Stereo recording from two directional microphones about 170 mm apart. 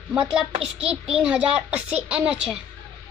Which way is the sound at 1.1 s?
5° right (ahead or behind).